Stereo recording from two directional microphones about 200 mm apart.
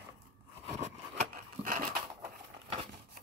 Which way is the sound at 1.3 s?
40° right (ahead or behind).